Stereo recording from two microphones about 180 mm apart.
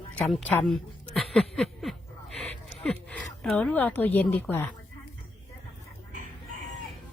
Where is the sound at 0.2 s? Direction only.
5° left (ahead or behind).